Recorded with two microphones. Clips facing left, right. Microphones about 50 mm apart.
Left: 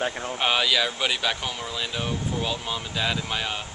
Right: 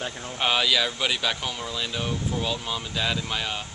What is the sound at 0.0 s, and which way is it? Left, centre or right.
Speech, left.